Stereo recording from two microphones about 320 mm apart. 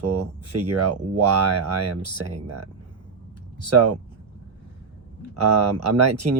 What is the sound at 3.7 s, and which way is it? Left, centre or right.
Speech, right.